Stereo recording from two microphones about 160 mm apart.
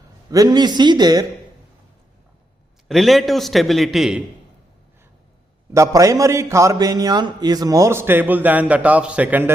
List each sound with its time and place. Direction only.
0.3 s a man's voice: 25° right (ahead or behind)
2.9 s a man's voice: centre (ahead or behind)
5.7 s a man's voice: 20° right (ahead or behind)